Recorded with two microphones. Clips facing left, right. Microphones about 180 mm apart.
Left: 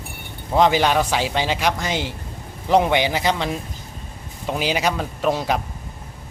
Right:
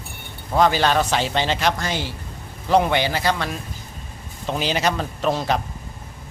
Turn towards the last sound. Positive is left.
turn(degrees=10)  # may be behind; listen again after turning